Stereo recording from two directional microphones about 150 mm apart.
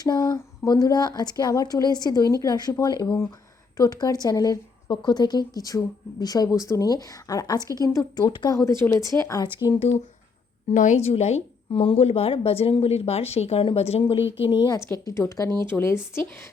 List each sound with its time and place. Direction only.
0.0 s a woman's voice: 25° left (ahead or behind)
10.8 s a woman's voice: 50° left (ahead or behind); by 14.8 s 35° left (ahead or behind)
15.0 s a woman's voice: 20° left (ahead or behind)
15.4 s speech: 30° right (ahead or behind)
15.7 s speech: 15° left (ahead or behind)